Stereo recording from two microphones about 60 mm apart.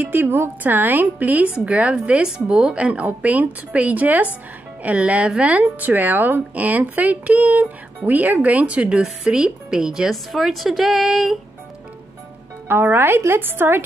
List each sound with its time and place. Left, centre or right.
0.0 s speech: right; by 11.3 s centre
12.6 s a woman's voice: right